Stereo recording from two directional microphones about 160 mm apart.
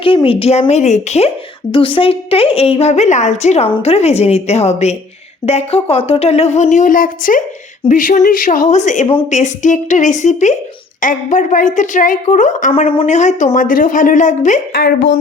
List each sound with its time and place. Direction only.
0.0 s a woman's voice: 35° left (ahead or behind)
1.7 s a woman's voice: 35° left (ahead or behind); by 14.6 s 50° left (ahead or behind)
14.7 s a woman's voice: 90° left